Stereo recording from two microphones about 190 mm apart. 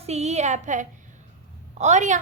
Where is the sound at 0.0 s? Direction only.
35° right (ahead or behind).